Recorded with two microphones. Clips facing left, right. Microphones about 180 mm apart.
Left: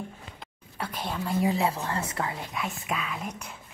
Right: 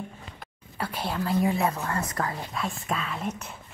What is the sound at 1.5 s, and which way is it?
Speech, 30° left (ahead or behind).